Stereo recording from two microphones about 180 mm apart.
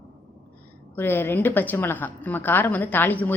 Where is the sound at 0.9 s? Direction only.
10° left (ahead or behind).